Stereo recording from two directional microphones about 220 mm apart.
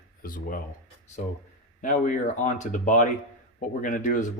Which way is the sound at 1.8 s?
35° left (ahead or behind).